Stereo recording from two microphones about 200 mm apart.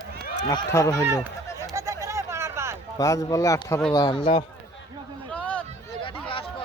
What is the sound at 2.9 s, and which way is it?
Speech, 15° left (ahead or behind).